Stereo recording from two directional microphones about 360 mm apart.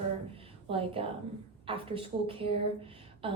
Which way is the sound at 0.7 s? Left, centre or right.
Centre.